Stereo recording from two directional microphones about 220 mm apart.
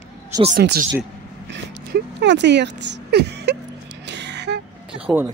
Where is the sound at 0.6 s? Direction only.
45° right (ahead or behind).